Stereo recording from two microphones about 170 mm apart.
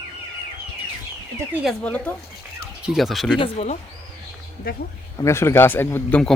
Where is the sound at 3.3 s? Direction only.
35° left (ahead or behind).